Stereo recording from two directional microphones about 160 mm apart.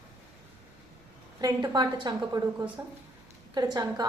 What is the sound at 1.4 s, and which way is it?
A woman's voice, 25° right (ahead or behind).